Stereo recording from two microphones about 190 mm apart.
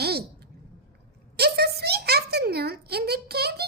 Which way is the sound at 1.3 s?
55° right (ahead or behind).